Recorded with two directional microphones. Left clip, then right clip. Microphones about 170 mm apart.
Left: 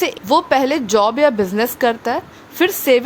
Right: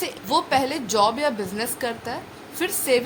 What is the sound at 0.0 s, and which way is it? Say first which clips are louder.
A woman's voice: left 8 dB; 50° left (ahead or behind).